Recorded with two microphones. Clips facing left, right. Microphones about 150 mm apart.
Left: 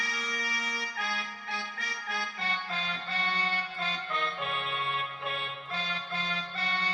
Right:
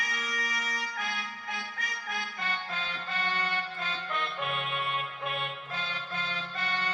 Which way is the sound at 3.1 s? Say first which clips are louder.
Right 1 dB; 35° left (ahead or behind).